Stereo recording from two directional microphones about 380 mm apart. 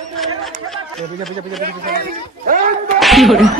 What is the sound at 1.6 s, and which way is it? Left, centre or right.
Speech, right.